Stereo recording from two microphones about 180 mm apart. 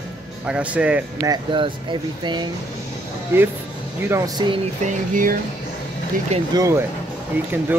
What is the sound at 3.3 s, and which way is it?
Speech, 15° right (ahead or behind).